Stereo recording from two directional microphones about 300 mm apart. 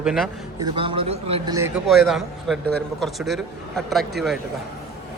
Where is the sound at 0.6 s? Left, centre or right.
Centre.